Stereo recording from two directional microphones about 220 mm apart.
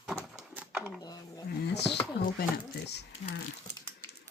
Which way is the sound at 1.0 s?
15° left (ahead or behind).